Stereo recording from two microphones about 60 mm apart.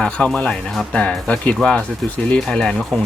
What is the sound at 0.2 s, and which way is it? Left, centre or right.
Speech, centre.